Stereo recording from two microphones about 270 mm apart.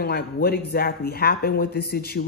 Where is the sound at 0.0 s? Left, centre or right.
Left.